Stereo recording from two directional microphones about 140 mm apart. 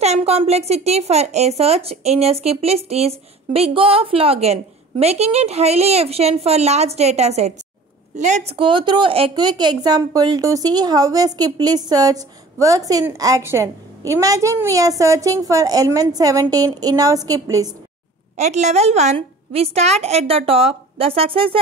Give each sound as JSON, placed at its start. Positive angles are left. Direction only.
{"t": 0.0, "sound": "a woman's voice", "side_deg": -50}
{"t": 8.5, "sound": "a woman's voice", "side_deg": -35}
{"t": 18.3, "sound": "a woman's voice", "side_deg": -55}